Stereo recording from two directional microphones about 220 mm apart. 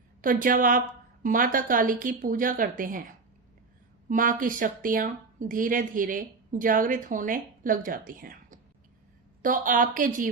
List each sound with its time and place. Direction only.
0.2 s speech: 40° right (ahead or behind)
4.1 s speech: 40° right (ahead or behind)